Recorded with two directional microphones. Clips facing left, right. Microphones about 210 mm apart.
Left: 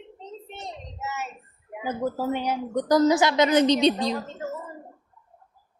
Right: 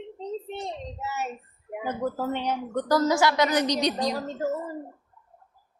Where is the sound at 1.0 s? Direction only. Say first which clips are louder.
Even; 35° right (ahead or behind).